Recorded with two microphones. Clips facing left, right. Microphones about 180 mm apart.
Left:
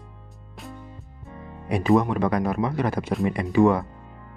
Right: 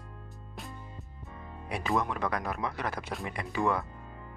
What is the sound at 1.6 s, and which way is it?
Speech, 20° left (ahead or behind).